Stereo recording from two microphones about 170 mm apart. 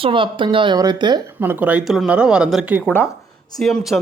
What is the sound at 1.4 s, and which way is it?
A man's voice, 10° right (ahead or behind).